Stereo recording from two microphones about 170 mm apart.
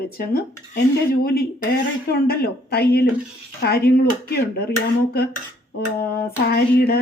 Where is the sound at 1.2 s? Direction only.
60° left (ahead or behind).